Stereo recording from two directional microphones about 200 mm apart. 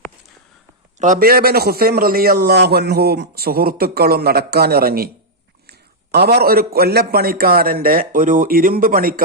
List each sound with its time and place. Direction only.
0.9 s a man's voice: 40° right (ahead or behind)